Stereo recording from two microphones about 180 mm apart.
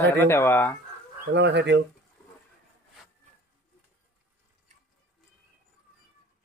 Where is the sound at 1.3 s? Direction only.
75° right (ahead or behind).